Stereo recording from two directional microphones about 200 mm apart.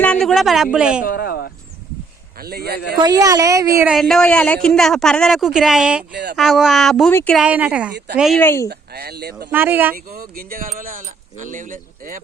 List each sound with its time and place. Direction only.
0.0 s speech: 5° left (ahead or behind)
1.0 s speech: 50° left (ahead or behind)
2.4 s speech: 50° right (ahead or behind)
3.0 s a woman's voice: 20° right (ahead or behind)
3.8 s a man's voice: 5° right (ahead or behind)
7.1 s speech: 10° left (ahead or behind)
7.3 s a man's voice: 5° right (ahead or behind)
7.9 s speech: 55° right (ahead or behind)
8.2 s a man's voice: centre (ahead or behind)
8.4 s speech: 15° left (ahead or behind)
8.7 s speech: 50° right (ahead or behind)
9.5 s a woman's voice: 10° right (ahead or behind)
9.9 s speech: 45° right (ahead or behind)